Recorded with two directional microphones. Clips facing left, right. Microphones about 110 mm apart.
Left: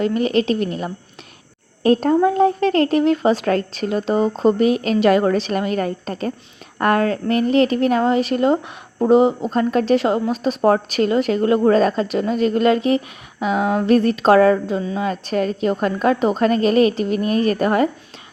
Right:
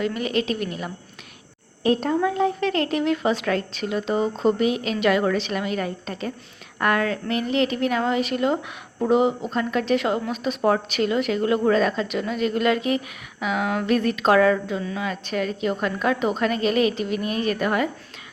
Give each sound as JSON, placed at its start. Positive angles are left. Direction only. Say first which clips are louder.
{"t": 0.0, "sound": "a woman's voice", "louder": "left 6 dB", "side_deg": 35}
{"t": 1.8, "sound": "a woman's voice", "louder": "left 6 dB", "side_deg": 45}